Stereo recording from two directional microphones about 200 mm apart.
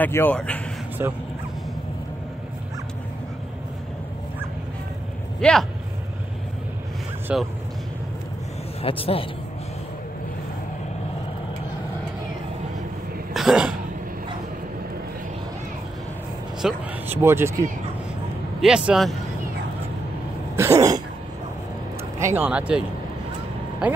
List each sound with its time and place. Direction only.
0.0 s speech: 10° left (ahead or behind)
1.0 s speech: 15° right (ahead or behind)
5.4 s speech: 5° left (ahead or behind)
7.3 s speech: 5° right (ahead or behind)
8.8 s a man's voice: 30° left (ahead or behind)
13.3 s throat clearing: centre (ahead or behind)
16.6 s speech: 10° right (ahead or behind)
18.6 s speech: 5° right (ahead or behind)
20.5 s speech: 15° right (ahead or behind)
22.2 s speech: 10° right (ahead or behind)